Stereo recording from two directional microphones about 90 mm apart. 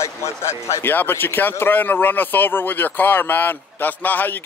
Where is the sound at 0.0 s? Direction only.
30° left (ahead or behind).